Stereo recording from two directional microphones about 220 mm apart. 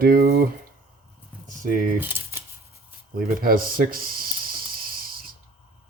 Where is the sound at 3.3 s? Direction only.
40° right (ahead or behind).